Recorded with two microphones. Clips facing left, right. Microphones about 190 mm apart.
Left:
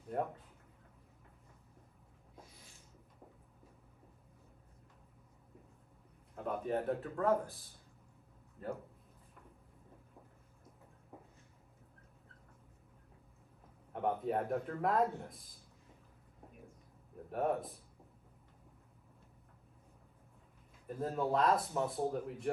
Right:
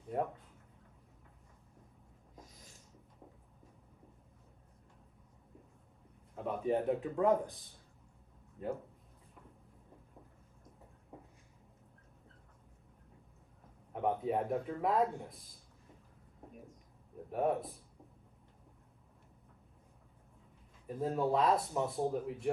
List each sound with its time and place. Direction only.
0.1 s speech: centre (ahead or behind)
2.3 s a sound: 40° right (ahead or behind)
6.3 s a sound: centre (ahead or behind)
6.8 s speech: 15° right (ahead or behind)
13.9 s speech: centre (ahead or behind)
17.3 s speech: centre (ahead or behind)
20.8 s speech: centre (ahead or behind)